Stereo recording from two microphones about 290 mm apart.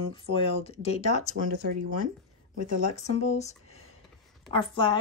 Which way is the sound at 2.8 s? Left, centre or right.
Left.